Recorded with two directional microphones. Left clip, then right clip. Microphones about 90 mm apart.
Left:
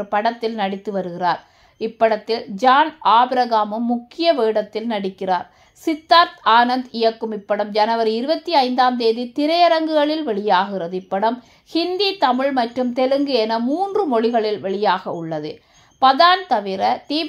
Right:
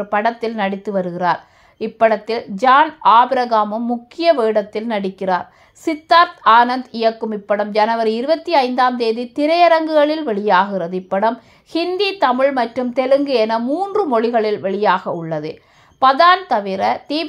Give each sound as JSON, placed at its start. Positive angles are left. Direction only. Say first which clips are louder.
{"t": 0.0, "sound": "a woman's voice", "louder": "right 2 dB", "side_deg": -40}